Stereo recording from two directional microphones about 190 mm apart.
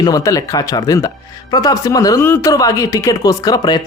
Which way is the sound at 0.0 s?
20° left (ahead or behind).